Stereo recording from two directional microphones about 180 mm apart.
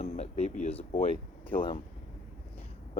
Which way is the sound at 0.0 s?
40° left (ahead or behind).